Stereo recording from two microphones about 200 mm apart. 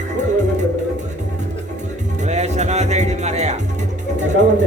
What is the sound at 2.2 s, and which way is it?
Music, 35° right (ahead or behind).